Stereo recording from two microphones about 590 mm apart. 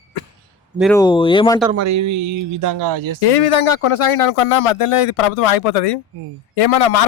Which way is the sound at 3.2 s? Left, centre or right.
Left.